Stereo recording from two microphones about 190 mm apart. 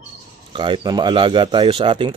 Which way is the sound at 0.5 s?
25° right (ahead or behind).